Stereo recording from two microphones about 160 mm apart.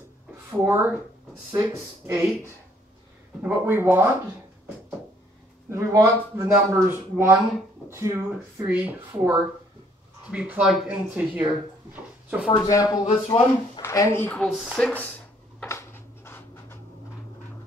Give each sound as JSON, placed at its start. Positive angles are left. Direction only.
{"t": 0.7, "sound": "speech", "side_deg": -10}
{"t": 3.4, "sound": "speech", "side_deg": -15}
{"t": 5.7, "sound": "a man's voice", "side_deg": -20}
{"t": 12.5, "sound": "speech", "side_deg": 20}
{"t": 13.0, "sound": "speech", "side_deg": 35}
{"t": 13.7, "sound": "speech", "side_deg": 20}
{"t": 14.3, "sound": "speech", "side_deg": 0}
{"t": 15.6, "sound": "a sound", "side_deg": 15}